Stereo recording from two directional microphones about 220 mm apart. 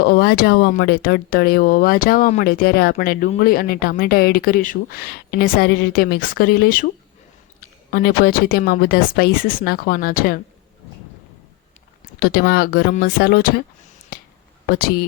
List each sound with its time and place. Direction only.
0.0 s speech: 45° left (ahead or behind)
12.2 s speech: 45° left (ahead or behind)
14.1 s finger snapping: 45° left (ahead or behind)